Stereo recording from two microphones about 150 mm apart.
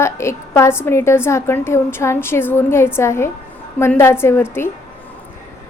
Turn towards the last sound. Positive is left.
turn(degrees=15)  # may be behind; listen again after turning